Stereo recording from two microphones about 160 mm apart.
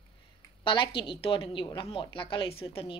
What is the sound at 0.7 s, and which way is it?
Speech, 30° left (ahead or behind).